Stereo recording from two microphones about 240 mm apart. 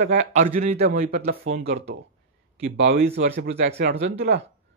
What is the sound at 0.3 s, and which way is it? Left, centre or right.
A man's voice, right.